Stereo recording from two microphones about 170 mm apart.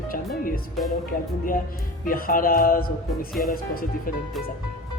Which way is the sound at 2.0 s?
55° left (ahead or behind).